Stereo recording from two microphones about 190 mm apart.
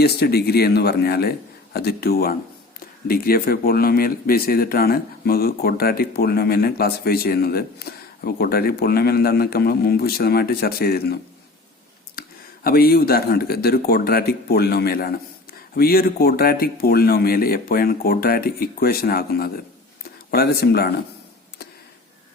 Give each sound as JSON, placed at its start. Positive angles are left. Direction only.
{"t": 0.0, "sound": "speech", "side_deg": 55}
{"t": 12.2, "sound": "a sound", "side_deg": 50}
{"t": 12.6, "sound": "speech", "side_deg": 50}